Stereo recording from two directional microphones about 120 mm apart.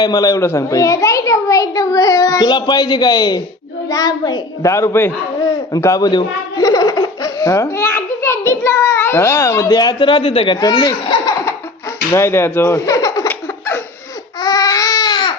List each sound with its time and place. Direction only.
0.0 s a child's voice: 35° left (ahead or behind)
12.1 s speech: 20° left (ahead or behind)
13.2 s a sound: 20° left (ahead or behind)
14.4 s baby cry: 35° left (ahead or behind)